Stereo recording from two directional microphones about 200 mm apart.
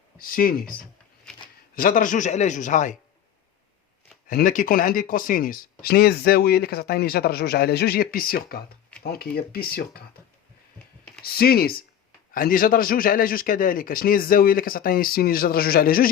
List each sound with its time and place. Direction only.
0.2 s a man's voice: 45° left (ahead or behind)
4.3 s a man's voice: 40° left (ahead or behind)
11.2 s a man's voice: 50° left (ahead or behind)